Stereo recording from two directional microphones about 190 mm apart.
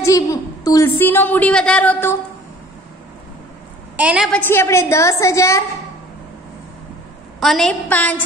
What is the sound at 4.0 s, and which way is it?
Speech, 5° right (ahead or behind).